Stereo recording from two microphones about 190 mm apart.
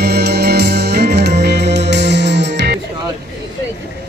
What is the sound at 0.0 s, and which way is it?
Music, 60° right (ahead or behind).